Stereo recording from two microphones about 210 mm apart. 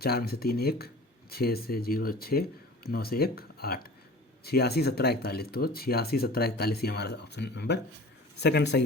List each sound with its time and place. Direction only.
0.0 s speech: 45° left (ahead or behind)